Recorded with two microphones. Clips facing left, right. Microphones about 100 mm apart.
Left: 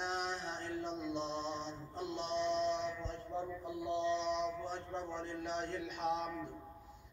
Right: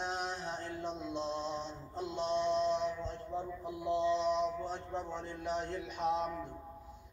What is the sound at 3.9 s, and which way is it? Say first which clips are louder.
Speech: right 4 dB; 15° right (ahead or behind).